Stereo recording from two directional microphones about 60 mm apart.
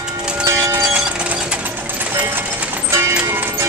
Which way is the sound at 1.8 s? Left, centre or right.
Right.